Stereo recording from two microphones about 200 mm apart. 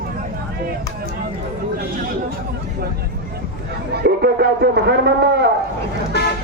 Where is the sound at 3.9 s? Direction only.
55° right (ahead or behind).